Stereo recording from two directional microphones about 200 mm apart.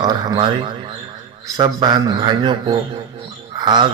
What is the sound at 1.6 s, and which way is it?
A man's voice, 20° right (ahead or behind).